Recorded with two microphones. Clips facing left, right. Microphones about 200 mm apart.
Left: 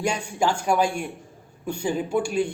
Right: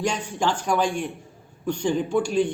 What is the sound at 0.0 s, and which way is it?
A man's voice, 10° left (ahead or behind).